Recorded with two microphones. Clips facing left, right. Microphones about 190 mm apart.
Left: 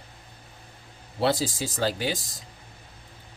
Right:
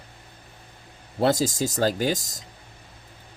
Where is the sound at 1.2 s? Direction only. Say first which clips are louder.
Right 3 dB; 45° right (ahead or behind).